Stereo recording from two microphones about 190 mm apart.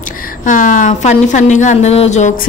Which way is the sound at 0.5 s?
45° left (ahead or behind).